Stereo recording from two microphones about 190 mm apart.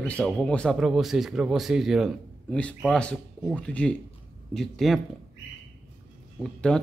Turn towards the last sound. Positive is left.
turn(degrees=5)  # may be behind; listen again after turning